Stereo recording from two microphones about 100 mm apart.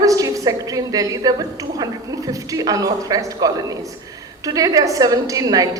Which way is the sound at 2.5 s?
35° right (ahead or behind).